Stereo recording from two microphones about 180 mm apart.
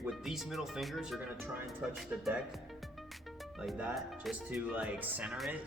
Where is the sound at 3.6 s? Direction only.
5° right (ahead or behind).